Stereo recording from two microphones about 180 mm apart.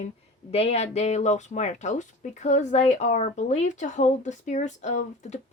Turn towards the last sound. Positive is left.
turn(degrees=40)  # may be behind; listen again after turning